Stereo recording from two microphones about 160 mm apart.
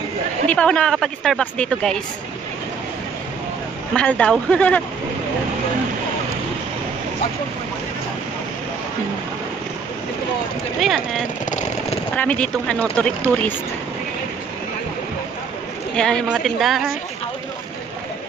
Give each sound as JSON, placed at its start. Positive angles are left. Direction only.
{"t": 0.5, "sound": "speech", "side_deg": 5}
{"t": 3.9, "sound": "speech", "side_deg": 5}
{"t": 10.8, "sound": "speech", "side_deg": 0}
{"t": 16.0, "sound": "speech", "side_deg": 5}